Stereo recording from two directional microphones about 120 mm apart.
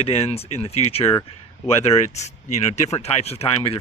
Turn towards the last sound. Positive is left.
turn(degrees=55)  # may be behind; listen again after turning